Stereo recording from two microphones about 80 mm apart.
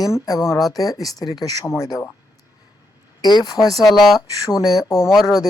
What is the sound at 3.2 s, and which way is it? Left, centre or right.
Speech, left.